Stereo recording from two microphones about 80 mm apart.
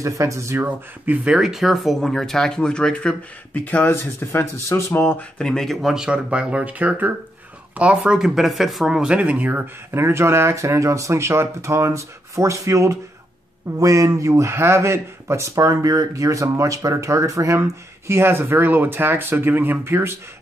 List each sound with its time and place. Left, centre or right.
0.0 s speech: right
0.6 s speech: right; by 5.2 s left
5.4 s speech: centre
8.2 s speech: centre; by 9.7 s right
9.8 s speech: right